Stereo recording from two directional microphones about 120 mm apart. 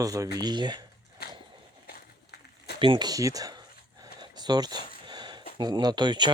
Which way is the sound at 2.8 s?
40° right (ahead or behind).